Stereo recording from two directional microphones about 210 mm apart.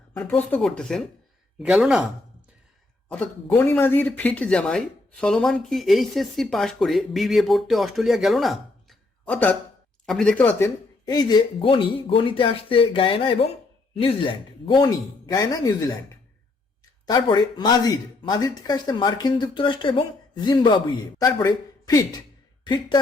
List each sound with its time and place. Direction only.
0.2 s speech: 10° left (ahead or behind)
3.5 s speech: 10° left (ahead or behind)
17.1 s a woman's voice: 20° left (ahead or behind)